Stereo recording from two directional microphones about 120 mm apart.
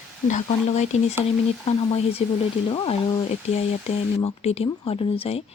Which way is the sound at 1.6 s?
55° left (ahead or behind).